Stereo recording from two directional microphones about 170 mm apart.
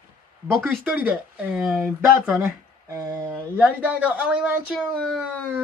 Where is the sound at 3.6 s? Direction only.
10° right (ahead or behind).